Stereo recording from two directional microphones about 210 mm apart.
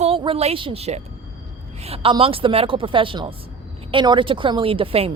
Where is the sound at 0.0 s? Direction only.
25° right (ahead or behind).